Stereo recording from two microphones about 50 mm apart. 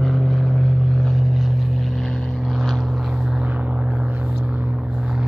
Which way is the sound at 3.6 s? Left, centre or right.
Right.